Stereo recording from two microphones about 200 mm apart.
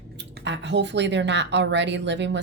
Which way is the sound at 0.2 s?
60° right (ahead or behind).